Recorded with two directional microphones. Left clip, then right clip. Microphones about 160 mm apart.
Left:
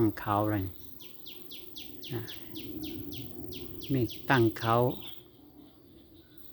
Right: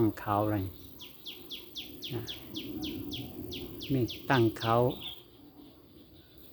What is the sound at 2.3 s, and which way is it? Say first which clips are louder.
Bird: right 3 dB; 45° right (ahead or behind).